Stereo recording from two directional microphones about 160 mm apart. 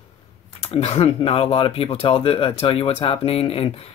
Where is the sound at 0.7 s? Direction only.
40° left (ahead or behind).